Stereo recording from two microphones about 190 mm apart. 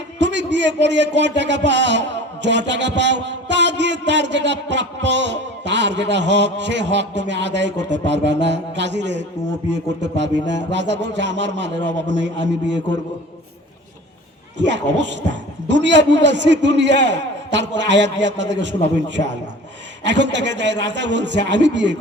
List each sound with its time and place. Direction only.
0.2 s a man's voice: 70° right (ahead or behind)
14.7 s a man's voice: 70° right (ahead or behind)